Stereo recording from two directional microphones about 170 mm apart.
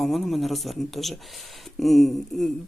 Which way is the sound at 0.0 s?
Centre (ahead or behind).